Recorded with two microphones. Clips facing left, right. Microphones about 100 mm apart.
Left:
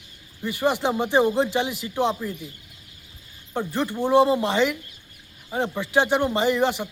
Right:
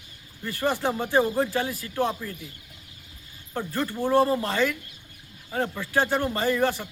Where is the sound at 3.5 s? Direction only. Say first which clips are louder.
Left 3 dB; 20° left (ahead or behind).